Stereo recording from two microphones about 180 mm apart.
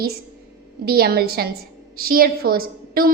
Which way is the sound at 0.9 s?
60° right (ahead or behind).